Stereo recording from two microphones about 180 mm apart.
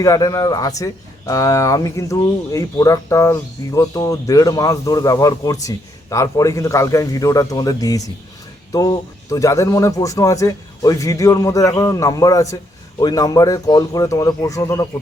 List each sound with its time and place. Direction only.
0.0 s speech: 20° left (ahead or behind)